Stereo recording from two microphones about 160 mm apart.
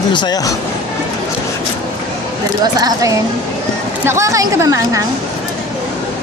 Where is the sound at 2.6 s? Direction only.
25° right (ahead or behind).